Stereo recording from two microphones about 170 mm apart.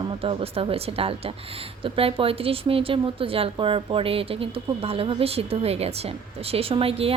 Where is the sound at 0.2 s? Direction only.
35° right (ahead or behind).